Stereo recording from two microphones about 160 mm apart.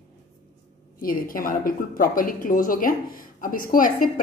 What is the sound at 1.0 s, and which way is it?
A woman's voice, 60° left (ahead or behind).